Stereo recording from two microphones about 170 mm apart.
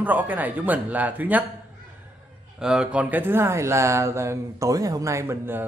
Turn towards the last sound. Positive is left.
turn(degrees=-15)  # may be behind; listen again after turning